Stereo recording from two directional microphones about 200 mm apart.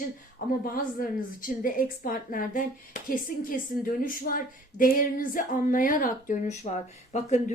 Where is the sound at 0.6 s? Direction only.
45° left (ahead or behind).